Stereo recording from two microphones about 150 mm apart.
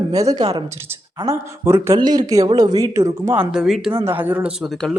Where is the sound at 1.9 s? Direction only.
30° right (ahead or behind); by 3.9 s centre (ahead or behind).